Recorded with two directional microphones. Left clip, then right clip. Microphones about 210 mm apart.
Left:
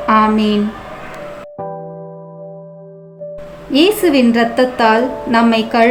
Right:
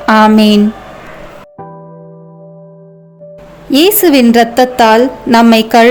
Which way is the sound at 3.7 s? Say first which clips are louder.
Right 4 dB; 45° right (ahead or behind).